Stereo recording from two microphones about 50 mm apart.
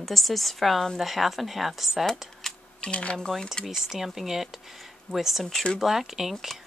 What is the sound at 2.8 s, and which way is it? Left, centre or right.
Cutlery, left.